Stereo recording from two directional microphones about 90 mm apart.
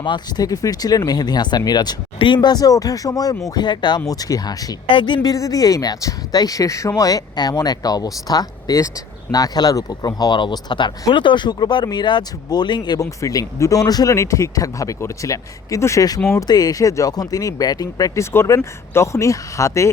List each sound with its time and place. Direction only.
0.0 s speech: 60° left (ahead or behind)
0.4 s speech: 40° left (ahead or behind)
2.1 s speech: 65° left (ahead or behind)
4.0 s speech: 45° left (ahead or behind)
4.9 s speech: 65° left (ahead or behind)
5.3 s speech: 40° left (ahead or behind)
13.0 s speech: 40° left (ahead or behind)